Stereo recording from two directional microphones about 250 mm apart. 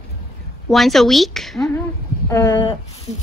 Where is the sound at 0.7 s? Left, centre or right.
Centre.